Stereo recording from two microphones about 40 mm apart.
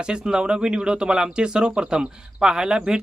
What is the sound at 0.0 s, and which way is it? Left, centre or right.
Speech, right.